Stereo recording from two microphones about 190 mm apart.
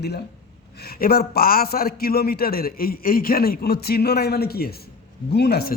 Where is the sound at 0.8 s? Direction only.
50° left (ahead or behind).